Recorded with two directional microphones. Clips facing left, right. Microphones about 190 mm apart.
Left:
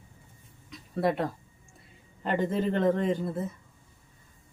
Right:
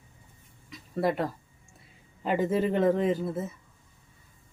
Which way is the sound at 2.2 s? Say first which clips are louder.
Right 2 dB; 5° right (ahead or behind).